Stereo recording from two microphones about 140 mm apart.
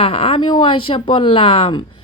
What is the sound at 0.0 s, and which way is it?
Speech, 45° left (ahead or behind).